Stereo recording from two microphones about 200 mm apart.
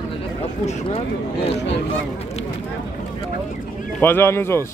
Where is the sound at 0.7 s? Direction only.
30° left (ahead or behind).